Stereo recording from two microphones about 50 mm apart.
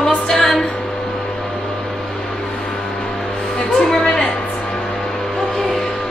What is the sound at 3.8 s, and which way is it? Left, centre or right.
Music, centre.